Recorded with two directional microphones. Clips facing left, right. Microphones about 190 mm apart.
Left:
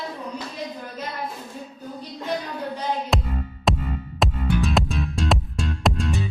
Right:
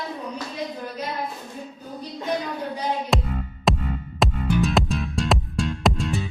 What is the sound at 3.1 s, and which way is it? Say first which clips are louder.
Music: right 1 dB; centre (ahead or behind).